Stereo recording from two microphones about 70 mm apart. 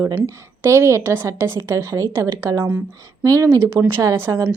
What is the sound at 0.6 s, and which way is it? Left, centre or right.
A woman's voice, right.